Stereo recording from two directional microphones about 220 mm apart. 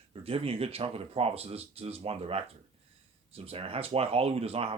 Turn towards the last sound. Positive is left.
turn(degrees=-25)  # may be behind; listen again after turning